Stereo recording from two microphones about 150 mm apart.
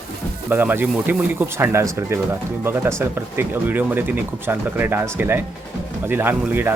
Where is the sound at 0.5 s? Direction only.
15° right (ahead or behind).